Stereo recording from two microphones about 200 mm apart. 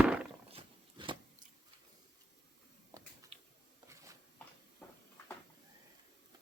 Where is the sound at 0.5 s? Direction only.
25° right (ahead or behind).